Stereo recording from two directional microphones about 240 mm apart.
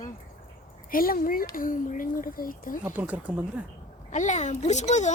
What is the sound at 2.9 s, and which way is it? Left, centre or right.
Speech, centre.